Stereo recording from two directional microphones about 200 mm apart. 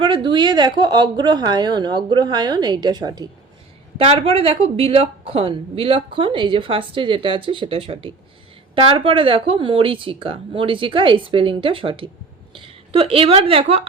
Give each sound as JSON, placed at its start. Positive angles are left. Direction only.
{"t": 0.0, "sound": "a woman's voice", "side_deg": -25}